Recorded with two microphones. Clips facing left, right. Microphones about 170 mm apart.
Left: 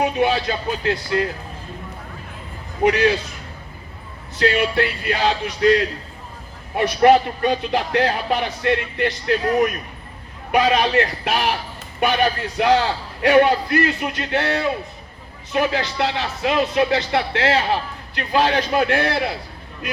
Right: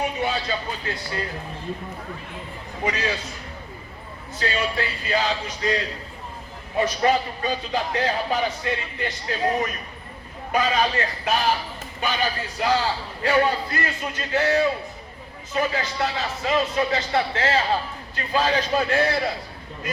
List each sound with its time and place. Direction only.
0.0 s speech: 70° left (ahead or behind)
2.8 s speech: 65° left (ahead or behind)
4.4 s speech: 70° left (ahead or behind)
10.5 s speech: 70° left (ahead or behind)